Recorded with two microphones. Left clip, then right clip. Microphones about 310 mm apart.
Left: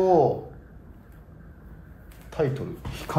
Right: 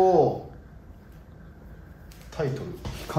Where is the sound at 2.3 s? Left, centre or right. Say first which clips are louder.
Left 4 dB; left.